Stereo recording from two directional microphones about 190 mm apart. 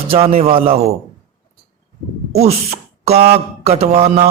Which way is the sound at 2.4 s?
35° right (ahead or behind).